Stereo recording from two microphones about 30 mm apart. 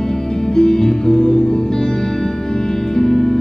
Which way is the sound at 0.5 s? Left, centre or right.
Centre.